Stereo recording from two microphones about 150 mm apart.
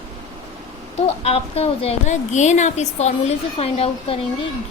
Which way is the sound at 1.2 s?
40° left (ahead or behind).